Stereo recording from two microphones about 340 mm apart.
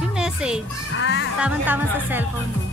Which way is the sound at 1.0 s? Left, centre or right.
Left.